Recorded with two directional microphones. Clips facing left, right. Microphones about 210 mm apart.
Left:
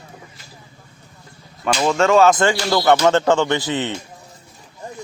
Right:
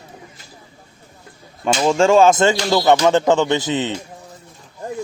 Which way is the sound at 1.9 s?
30° right (ahead or behind).